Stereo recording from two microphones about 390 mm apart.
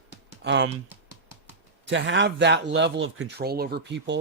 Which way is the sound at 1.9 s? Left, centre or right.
Right.